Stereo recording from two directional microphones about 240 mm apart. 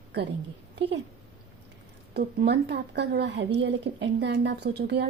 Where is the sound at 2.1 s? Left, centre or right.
Right.